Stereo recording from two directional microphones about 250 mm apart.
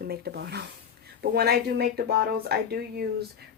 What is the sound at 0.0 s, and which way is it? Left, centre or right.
Speech, right.